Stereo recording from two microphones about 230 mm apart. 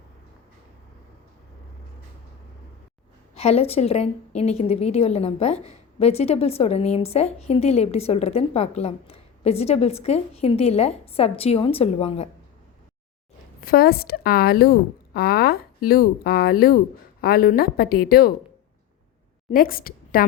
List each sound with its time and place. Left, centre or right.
3.3 s a woman's voice: left
13.6 s a woman's voice: left
19.5 s a woman's voice: left